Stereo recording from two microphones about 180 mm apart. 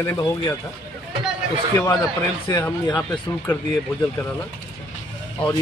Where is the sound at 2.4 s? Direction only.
15° left (ahead or behind).